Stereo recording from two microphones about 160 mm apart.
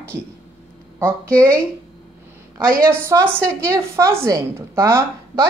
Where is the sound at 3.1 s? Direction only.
20° right (ahead or behind).